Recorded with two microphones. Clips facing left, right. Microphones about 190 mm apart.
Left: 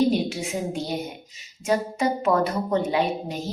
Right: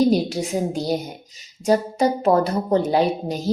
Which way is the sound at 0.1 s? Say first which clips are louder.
Right 4 dB; 35° right (ahead or behind).